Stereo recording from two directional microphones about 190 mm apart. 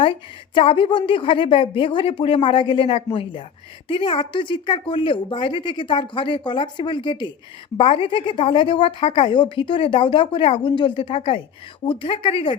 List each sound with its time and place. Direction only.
0.5 s a woman's voice: 30° left (ahead or behind)